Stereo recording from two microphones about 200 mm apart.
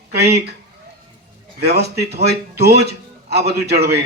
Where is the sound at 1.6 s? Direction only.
55° right (ahead or behind).